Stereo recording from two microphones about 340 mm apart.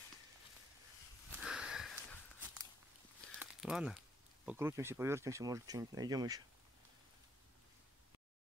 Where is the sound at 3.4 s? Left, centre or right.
Centre.